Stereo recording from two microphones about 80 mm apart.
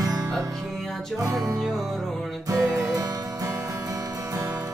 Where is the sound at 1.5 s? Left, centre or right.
Centre.